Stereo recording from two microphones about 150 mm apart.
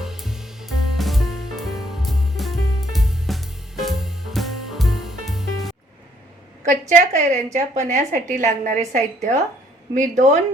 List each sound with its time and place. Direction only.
0.0 s music: centre (ahead or behind)
6.7 s a woman's voice: 55° right (ahead or behind)